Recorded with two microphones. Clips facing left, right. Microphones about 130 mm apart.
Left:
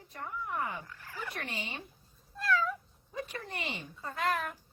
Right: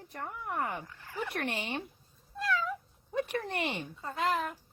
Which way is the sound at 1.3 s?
65° right (ahead or behind).